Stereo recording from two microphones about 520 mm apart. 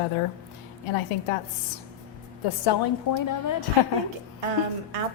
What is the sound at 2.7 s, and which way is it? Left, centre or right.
Speech, left.